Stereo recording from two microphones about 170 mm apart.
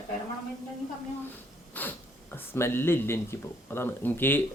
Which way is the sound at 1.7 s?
10° left (ahead or behind).